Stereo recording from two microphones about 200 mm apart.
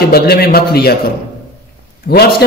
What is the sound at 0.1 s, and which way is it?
Speech, 50° left (ahead or behind).